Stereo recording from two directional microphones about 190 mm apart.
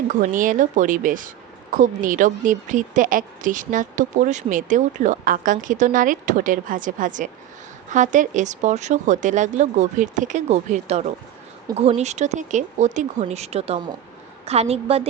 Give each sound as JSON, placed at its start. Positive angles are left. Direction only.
{"t": 0.1, "sound": "a woman's voice", "side_deg": -45}